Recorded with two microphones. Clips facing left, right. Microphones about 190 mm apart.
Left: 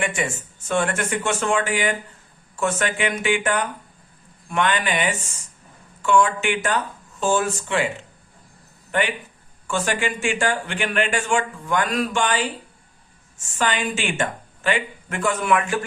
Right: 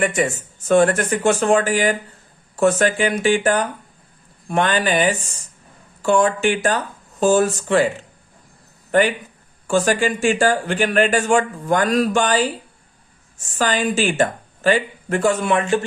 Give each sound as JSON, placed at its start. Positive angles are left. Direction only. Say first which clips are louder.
{"t": 0.0, "sound": "speech", "louder": "right 6 dB", "side_deg": -40}
{"t": 8.9, "sound": "speech", "louder": "right 7 dB", "side_deg": -40}